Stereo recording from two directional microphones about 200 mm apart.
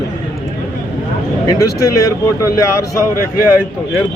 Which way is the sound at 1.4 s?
15° left (ahead or behind).